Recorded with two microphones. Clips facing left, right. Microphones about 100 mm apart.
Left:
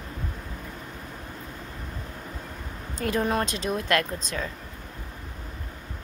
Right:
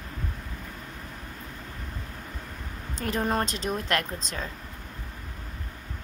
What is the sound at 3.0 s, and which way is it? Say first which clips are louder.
Speech: left 2 dB; 40° right (ahead or behind).